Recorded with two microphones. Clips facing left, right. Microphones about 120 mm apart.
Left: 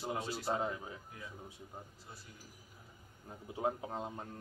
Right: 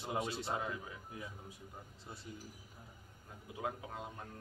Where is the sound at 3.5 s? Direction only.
30° left (ahead or behind).